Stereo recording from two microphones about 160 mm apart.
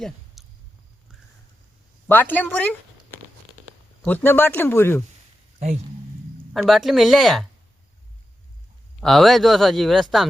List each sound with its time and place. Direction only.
0.4 s a sound: centre (ahead or behind)
2.0 s speech: 10° left (ahead or behind)
4.0 s speech: 10° left (ahead or behind)
6.5 s speech: centre (ahead or behind)
9.0 s speech: centre (ahead or behind)